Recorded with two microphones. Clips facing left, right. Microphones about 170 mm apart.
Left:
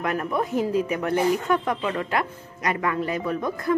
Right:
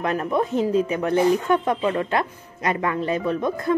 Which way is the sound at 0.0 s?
25° right (ahead or behind).